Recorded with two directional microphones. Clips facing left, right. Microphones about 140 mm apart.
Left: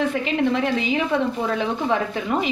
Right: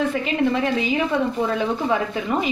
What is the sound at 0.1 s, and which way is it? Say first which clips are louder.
A woman's voice: even; centre (ahead or behind).